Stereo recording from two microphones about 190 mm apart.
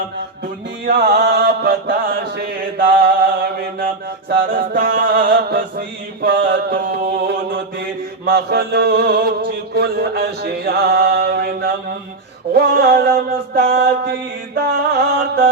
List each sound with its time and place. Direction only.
0.9 s chant: 55° right (ahead or behind)
6.2 s mantra: 55° right (ahead or behind)
12.5 s music: 55° right (ahead or behind)